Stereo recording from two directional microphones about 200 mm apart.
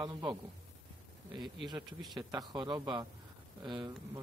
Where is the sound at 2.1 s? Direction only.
20° right (ahead or behind).